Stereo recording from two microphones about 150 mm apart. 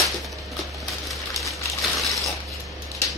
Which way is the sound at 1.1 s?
Centre (ahead or behind).